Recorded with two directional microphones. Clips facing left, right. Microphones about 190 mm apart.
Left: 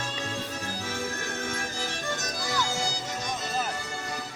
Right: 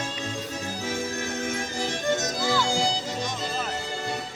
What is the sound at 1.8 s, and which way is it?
Music, 20° right (ahead or behind).